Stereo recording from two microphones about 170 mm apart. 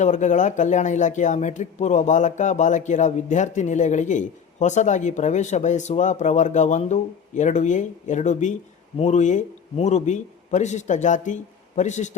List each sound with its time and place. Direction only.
0.0 s speech: 45° left (ahead or behind)